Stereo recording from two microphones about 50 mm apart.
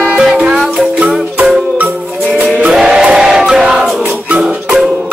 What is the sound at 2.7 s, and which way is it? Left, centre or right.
Music, centre.